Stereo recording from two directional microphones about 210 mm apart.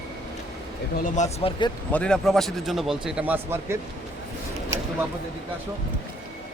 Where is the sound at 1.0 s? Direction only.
35° left (ahead or behind).